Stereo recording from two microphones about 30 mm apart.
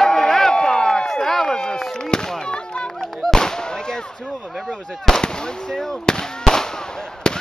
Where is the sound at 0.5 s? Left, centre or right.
Left.